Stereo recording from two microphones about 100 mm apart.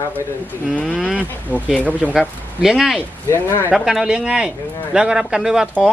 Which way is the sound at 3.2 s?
25° left (ahead or behind).